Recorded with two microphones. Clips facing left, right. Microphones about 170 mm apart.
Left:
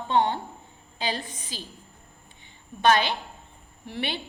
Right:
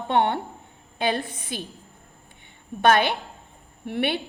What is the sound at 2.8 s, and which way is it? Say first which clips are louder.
A woman's voice: right 2 dB; 55° right (ahead or behind).